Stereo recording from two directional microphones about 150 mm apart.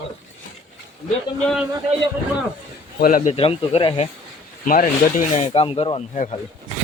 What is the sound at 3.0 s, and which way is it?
Speech, 65° left (ahead or behind).